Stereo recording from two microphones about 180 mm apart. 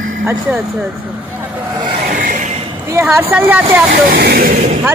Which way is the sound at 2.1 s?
50° right (ahead or behind).